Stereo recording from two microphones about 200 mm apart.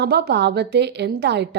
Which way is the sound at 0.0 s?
55° right (ahead or behind).